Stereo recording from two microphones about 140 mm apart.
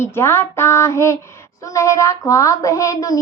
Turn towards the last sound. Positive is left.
turn(degrees=25)  # may be behind; listen again after turning